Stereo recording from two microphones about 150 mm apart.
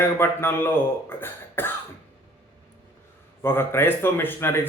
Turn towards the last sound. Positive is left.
turn(degrees=15)  # may be behind; listen again after turning